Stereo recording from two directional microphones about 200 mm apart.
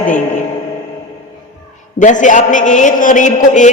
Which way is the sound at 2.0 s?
40° left (ahead or behind).